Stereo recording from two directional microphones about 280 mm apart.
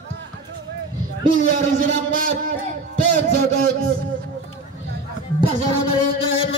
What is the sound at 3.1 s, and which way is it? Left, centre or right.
Speech, right.